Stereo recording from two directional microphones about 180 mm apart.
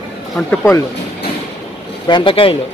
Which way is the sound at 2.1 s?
25° left (ahead or behind).